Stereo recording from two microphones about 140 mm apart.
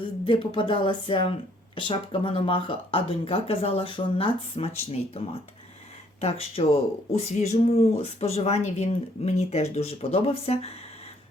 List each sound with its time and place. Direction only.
0.3 s speech: 40° left (ahead or behind)